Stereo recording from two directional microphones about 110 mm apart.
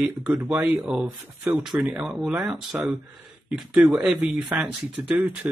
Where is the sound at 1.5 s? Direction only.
15° right (ahead or behind).